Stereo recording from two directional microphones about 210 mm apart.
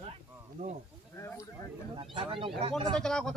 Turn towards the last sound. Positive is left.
turn(degrees=5)  # may be behind; listen again after turning